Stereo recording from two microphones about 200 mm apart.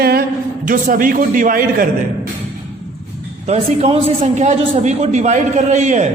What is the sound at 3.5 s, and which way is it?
A man's voice, 30° right (ahead or behind).